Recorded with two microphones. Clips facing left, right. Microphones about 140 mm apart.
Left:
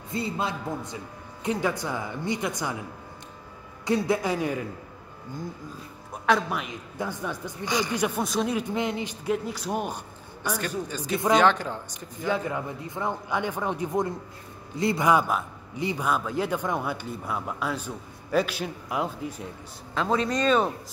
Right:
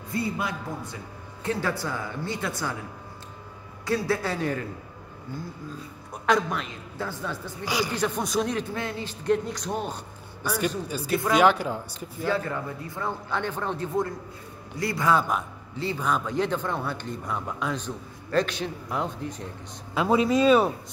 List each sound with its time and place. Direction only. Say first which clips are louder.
0.1 s a man's voice: even; 25° left (ahead or behind)
3.8 s speech: left 2 dB; 20° left (ahead or behind)
6.2 s speech: even; 5° left (ahead or behind)
7.6 s speech: even; 10° right (ahead or behind)
7.9 s speech: left 1 dB; 10° left (ahead or behind)
8.2 s speech: even; centre (ahead or behind)
8.6 s speech: left 4 dB; 20° left (ahead or behind)
9.2 s speech: right 5 dB; 5° left (ahead or behind)
10.9 s speech: left 4 dB; 10° right (ahead or behind)
12.3 s a man's voice: even; 15° left (ahead or behind)
19.9 s speech: right 4 dB; 10° right (ahead or behind)